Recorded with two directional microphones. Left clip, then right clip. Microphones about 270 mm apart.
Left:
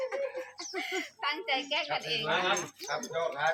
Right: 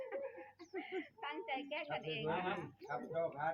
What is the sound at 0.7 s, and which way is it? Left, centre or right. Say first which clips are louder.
Speech: left 9 dB; left.